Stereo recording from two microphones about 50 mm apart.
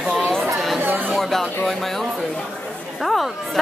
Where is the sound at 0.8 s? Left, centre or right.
Right.